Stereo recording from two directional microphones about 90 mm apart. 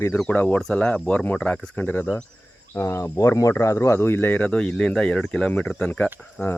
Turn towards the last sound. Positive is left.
turn(degrees=25)  # may be behind; listen again after turning